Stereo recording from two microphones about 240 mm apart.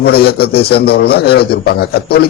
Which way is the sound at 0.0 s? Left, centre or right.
Left.